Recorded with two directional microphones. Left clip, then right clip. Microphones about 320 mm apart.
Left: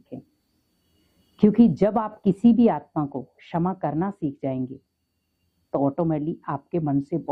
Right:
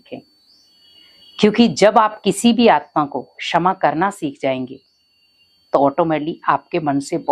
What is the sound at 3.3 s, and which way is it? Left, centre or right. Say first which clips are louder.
Speech: right 14 dB; centre.